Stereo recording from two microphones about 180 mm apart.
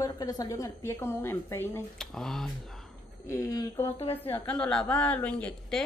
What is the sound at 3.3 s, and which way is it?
A woman's voice, 15° left (ahead or behind).